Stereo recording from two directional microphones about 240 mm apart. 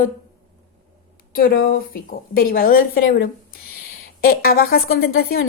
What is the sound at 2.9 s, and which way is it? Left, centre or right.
Speech, left.